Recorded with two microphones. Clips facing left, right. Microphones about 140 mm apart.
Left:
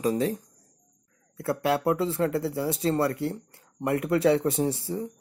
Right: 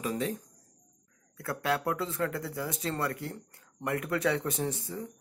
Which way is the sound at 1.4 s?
25° left (ahead or behind).